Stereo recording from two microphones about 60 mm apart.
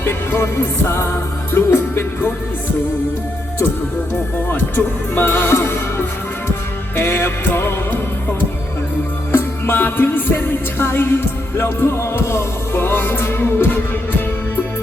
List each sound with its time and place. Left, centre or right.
0.0 s music: left
4.4 s speech: left
6.9 s speech: left
9.3 s music: left